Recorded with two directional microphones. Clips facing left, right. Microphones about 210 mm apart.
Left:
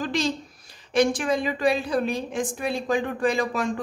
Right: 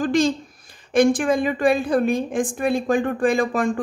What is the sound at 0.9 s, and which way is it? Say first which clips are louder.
A woman's voice: right 5 dB; 50° right (ahead or behind).